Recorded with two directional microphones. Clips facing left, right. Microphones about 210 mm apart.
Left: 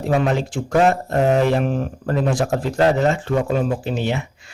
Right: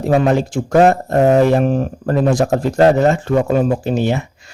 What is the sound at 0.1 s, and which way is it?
Speech, 40° right (ahead or behind).